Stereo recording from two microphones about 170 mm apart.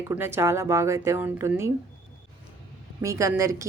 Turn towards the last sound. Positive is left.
turn(degrees=-20)  # may be behind; listen again after turning